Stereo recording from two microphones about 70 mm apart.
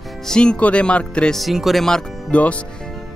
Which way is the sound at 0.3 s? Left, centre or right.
Centre.